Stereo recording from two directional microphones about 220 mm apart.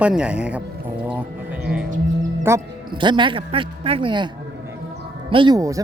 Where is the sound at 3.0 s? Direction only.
20° right (ahead or behind).